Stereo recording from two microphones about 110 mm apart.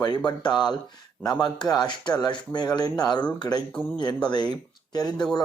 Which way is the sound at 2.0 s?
40° left (ahead or behind).